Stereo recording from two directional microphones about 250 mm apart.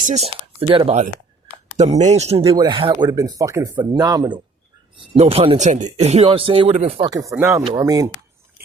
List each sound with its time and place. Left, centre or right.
0.0 s speech: right